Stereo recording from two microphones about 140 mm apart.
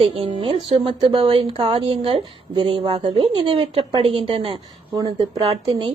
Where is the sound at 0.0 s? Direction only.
40° right (ahead or behind).